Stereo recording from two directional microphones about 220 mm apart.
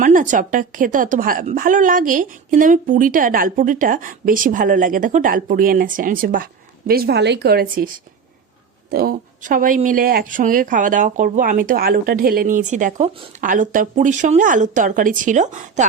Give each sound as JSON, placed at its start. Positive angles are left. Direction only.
{"t": 0.0, "sound": "a woman's voice", "side_deg": -35}
{"t": 8.9, "sound": "a woman's voice", "side_deg": -40}